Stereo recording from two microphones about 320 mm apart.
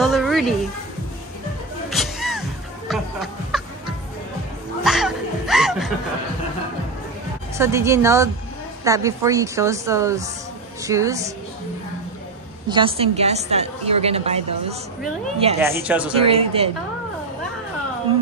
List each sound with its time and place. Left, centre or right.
0.0 s a sound: centre
1.9 s music: centre
4.8 s music: centre
7.5 s a woman's voice: centre
12.6 s a woman's voice: centre
16.2 s a woman's voice: centre